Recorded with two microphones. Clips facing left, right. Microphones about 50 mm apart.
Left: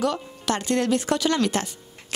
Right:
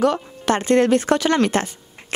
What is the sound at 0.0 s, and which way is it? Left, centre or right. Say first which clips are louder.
A woman's voice: right 6 dB; right.